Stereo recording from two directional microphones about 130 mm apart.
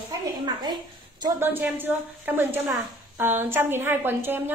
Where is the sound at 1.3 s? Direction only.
15° right (ahead or behind).